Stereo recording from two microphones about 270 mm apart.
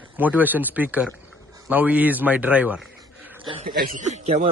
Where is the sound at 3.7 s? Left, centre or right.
Right.